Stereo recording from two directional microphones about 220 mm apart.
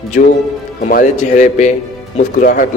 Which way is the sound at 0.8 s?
35° left (ahead or behind).